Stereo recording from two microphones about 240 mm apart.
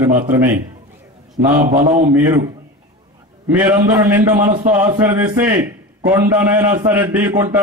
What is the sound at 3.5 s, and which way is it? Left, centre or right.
A man's voice, centre.